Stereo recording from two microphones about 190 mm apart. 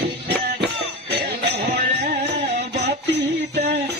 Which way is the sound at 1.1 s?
55° right (ahead or behind).